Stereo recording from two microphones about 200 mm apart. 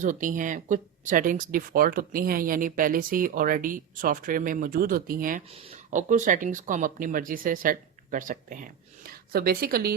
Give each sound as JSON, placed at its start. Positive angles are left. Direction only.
{"t": 0.0, "sound": "speech", "side_deg": -40}
{"t": 5.5, "sound": "a woman's voice", "side_deg": -30}